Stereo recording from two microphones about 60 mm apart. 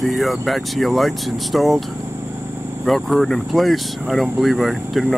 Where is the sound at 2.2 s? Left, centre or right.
Right.